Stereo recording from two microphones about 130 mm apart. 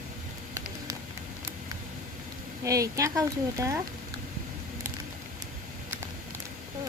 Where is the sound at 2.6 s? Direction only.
25° right (ahead or behind).